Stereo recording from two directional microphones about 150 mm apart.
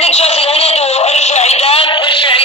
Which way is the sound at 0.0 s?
45° left (ahead or behind).